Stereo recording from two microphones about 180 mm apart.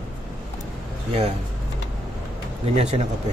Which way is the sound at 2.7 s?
35° right (ahead or behind).